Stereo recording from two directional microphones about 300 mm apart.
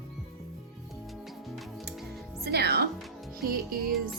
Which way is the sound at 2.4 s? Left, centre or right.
Right.